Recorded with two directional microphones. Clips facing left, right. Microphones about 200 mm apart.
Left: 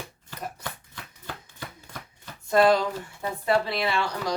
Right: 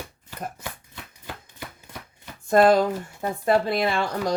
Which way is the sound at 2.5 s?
50° right (ahead or behind).